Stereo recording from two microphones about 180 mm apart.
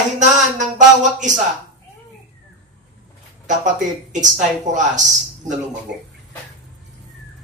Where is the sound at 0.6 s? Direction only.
45° right (ahead or behind).